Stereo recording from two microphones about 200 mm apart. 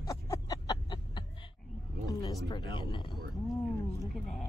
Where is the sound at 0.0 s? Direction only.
15° left (ahead or behind).